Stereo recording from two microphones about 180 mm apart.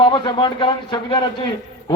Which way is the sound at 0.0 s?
25° left (ahead or behind).